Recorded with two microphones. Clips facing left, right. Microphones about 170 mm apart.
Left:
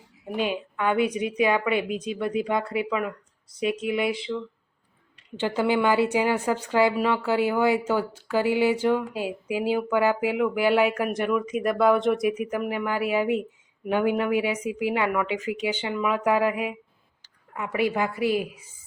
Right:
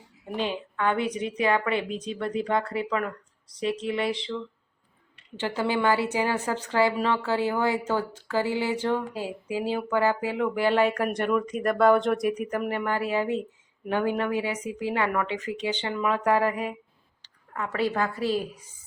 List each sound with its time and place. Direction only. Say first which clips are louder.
0.3 s speech: left 2 dB; 15° left (ahead or behind)
5.4 s speech: left 3 dB; 15° left (ahead or behind)